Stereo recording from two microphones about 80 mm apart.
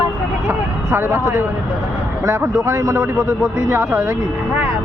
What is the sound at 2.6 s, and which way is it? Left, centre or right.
Speech, right.